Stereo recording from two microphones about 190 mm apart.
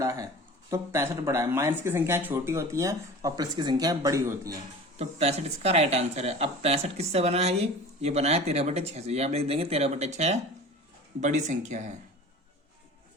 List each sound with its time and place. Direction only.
0.0 s speech: 15° right (ahead or behind)
4.9 s speech: 35° right (ahead or behind)